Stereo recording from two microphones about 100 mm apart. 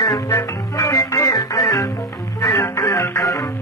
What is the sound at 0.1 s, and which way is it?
Music, 35° left (ahead or behind).